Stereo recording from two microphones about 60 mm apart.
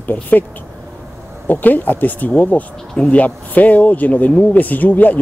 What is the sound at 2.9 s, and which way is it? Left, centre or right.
Speech, centre.